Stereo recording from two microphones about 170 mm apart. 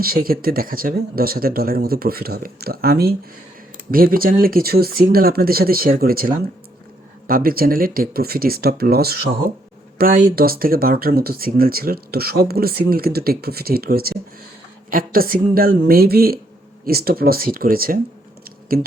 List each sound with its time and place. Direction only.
0.0 s speech: 60° right (ahead or behind)